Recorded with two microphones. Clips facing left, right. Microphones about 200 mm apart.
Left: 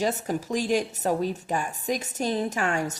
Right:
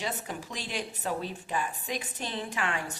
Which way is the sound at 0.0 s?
45° left (ahead or behind).